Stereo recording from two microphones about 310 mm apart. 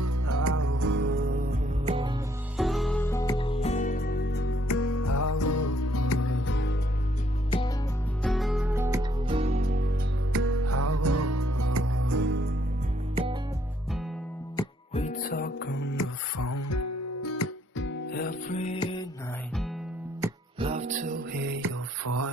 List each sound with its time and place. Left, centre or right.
0.0 s music: right
0.8 s music: right
1.9 s music: centre
2.5 s music: centre; by 4.4 s left
4.6 s music: left
8.2 s music: centre; by 9.8 s right
10.3 s music: right
14.6 s music: left
16.3 s music: left; by 18.9 s centre
20.2 s music: centre
21.5 s mantra: right